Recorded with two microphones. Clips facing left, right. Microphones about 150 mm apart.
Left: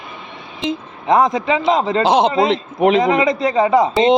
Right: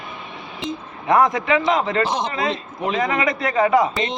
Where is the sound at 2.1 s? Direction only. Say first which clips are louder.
Left 9 dB; 65° left (ahead or behind).